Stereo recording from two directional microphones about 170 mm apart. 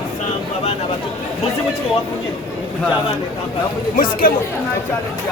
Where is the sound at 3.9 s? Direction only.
55° left (ahead or behind).